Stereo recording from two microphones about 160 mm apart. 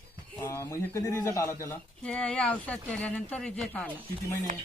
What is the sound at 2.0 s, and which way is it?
Speech, 10° left (ahead or behind).